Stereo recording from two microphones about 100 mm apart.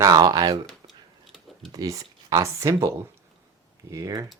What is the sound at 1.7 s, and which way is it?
Speech, 35° right (ahead or behind).